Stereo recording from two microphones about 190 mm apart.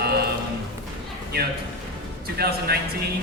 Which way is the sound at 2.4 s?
55° right (ahead or behind).